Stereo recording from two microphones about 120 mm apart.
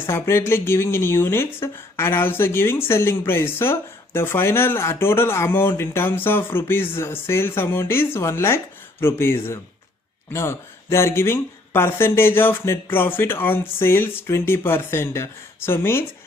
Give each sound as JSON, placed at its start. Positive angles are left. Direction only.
{"t": 0.0, "sound": "speech", "side_deg": 20}